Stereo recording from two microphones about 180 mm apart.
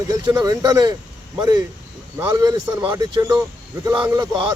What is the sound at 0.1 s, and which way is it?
Speech, 20° right (ahead or behind).